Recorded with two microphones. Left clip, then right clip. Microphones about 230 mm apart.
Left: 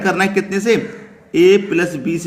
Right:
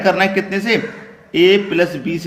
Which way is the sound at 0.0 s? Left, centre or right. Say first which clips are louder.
Right 2 dB; left.